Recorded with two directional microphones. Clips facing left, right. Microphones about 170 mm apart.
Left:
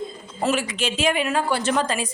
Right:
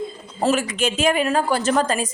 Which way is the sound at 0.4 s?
45° right (ahead or behind).